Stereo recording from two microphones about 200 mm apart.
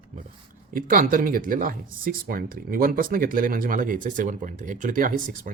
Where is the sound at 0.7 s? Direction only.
45° right (ahead or behind).